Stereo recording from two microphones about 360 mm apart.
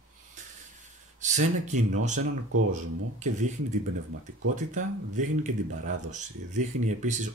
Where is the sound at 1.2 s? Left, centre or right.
Centre.